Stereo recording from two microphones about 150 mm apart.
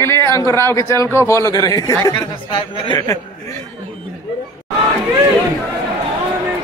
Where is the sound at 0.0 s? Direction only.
20° left (ahead or behind).